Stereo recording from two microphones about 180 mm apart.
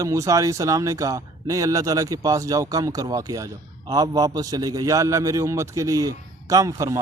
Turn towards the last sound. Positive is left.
turn(degrees=-20)  # may be behind; listen again after turning